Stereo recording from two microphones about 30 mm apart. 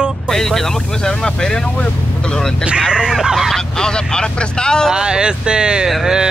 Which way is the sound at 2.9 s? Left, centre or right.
Right.